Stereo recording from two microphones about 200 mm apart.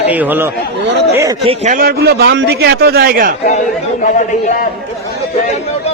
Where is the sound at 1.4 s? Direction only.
35° right (ahead or behind).